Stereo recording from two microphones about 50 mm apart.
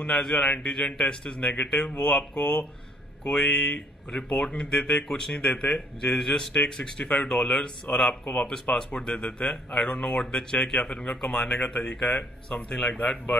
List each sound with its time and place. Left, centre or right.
0.1 s speech: centre
4.7 s speech: left
5.5 s speech: left
5.8 s speech: centre